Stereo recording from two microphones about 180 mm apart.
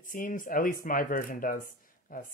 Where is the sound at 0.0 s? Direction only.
50° left (ahead or behind).